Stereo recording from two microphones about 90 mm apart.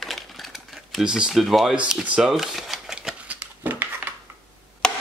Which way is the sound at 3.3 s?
20° right (ahead or behind).